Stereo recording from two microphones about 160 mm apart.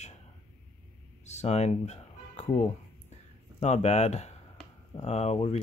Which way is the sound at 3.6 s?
45° left (ahead or behind).